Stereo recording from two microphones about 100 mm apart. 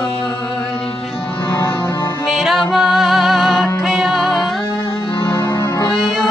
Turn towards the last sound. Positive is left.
turn(degrees=-5)  # may be behind; listen again after turning